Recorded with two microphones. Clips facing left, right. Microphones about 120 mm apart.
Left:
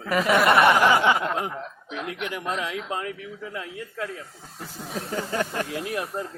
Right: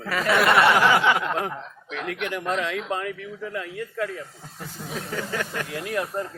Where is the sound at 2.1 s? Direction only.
5° left (ahead or behind).